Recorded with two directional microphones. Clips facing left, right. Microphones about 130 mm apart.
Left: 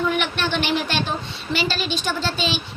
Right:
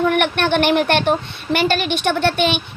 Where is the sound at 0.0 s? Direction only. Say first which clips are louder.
Right 6 dB; 55° right (ahead or behind).